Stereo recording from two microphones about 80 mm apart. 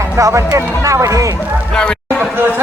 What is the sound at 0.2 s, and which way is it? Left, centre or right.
Speech, right.